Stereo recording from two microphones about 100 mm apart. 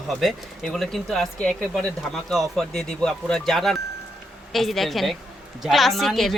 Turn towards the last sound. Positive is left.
turn(degrees=0)  # may be behind; listen again after turning